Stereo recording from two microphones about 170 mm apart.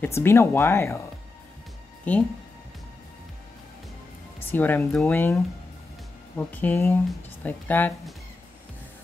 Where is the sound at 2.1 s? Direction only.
10° left (ahead or behind).